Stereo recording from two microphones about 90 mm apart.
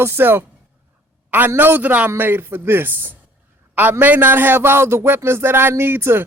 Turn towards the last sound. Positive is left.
turn(degrees=-25)  # may be behind; listen again after turning